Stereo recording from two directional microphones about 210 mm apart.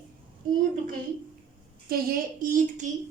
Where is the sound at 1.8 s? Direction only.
45° right (ahead or behind).